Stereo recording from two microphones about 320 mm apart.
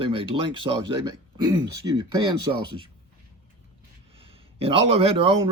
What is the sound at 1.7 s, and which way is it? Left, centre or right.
Speech, right.